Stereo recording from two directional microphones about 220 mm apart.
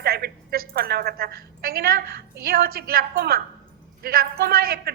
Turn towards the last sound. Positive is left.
turn(degrees=-45)  # may be behind; listen again after turning